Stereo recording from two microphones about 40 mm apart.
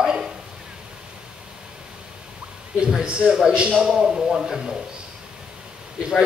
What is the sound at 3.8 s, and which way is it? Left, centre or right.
Speech, centre.